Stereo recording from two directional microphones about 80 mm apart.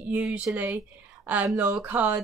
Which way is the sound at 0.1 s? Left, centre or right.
Right.